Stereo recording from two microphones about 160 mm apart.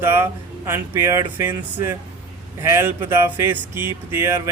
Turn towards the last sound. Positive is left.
turn(degrees=-15)  # may be behind; listen again after turning